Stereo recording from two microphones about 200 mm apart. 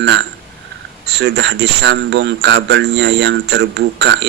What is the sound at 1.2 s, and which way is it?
Speech, 60° right (ahead or behind).